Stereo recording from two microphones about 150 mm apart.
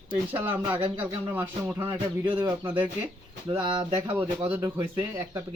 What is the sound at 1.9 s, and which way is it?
Speech, 35° right (ahead or behind).